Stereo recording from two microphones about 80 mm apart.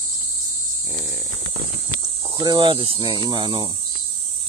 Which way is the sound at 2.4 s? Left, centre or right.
Right.